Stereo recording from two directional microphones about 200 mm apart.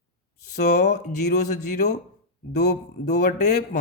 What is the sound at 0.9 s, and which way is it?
Speech, 55° left (ahead or behind).